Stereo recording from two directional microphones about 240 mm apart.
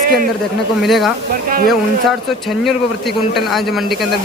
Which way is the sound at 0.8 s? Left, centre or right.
Centre.